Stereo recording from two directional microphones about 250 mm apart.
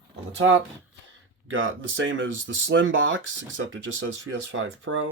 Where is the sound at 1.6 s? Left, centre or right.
Right.